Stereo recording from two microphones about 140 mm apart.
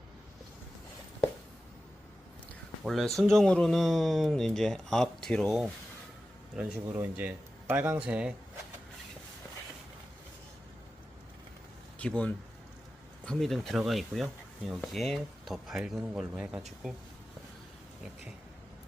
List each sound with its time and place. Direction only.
2.8 s speech: centre (ahead or behind)
6.6 s speech: 10° right (ahead or behind)
11.9 s speech: 10° left (ahead or behind)